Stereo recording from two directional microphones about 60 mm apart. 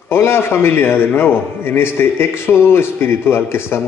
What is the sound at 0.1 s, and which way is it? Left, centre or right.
A man's voice, left.